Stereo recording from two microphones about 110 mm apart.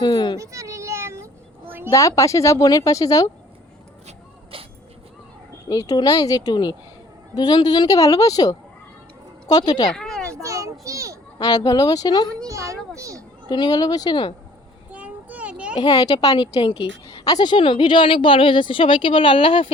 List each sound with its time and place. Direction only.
0.0 s a child's voice: 45° left (ahead or behind)
0.3 s a sound: 30° right (ahead or behind)
1.9 s speech: 30° left (ahead or behind)
4.5 s vehicle: 55° right (ahead or behind)
5.6 s speech: 35° left (ahead or behind)
9.9 s a sound: 5° left (ahead or behind)
10.4 s children playing: 30° right (ahead or behind)
11.3 s speech: 35° left (ahead or behind)
12.5 s children playing: 30° right (ahead or behind)
13.5 s speech: 40° left (ahead or behind)
14.9 s a sound: 15° right (ahead or behind)
15.7 s a woman's voice: 40° left (ahead or behind)